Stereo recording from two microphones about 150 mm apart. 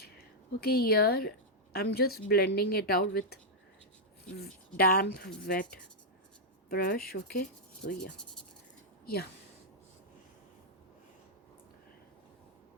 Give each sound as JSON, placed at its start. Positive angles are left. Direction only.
{"t": 0.6, "sound": "a woman's voice", "side_deg": 90}
{"t": 4.4, "sound": "a woman's voice", "side_deg": 90}
{"t": 5.5, "sound": "speech", "side_deg": 70}